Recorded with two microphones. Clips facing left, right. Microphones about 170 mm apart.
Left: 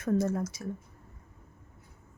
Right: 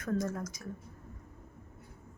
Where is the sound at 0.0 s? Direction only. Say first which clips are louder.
Left 5 dB; 25° left (ahead or behind).